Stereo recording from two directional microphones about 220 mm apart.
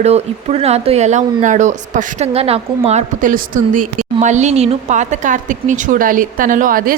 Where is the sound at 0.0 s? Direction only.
30° right (ahead or behind).